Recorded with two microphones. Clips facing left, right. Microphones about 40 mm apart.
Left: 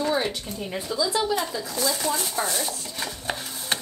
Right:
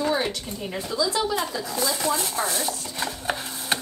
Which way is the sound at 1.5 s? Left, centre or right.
Centre.